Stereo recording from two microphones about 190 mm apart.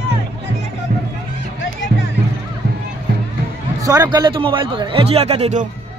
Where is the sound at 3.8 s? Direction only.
20° right (ahead or behind); by 5.7 s 35° right (ahead or behind).